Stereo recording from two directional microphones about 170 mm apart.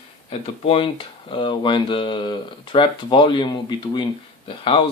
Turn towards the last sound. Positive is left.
turn(degrees=30)  # may be behind; listen again after turning